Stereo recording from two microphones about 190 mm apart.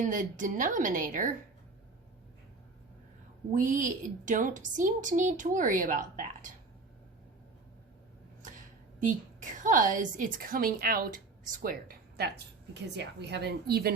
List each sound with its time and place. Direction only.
0.0 s a woman's voice: 40° right (ahead or behind)
3.5 s a woman's voice: 40° right (ahead or behind)
8.4 s a woman's voice: 40° right (ahead or behind)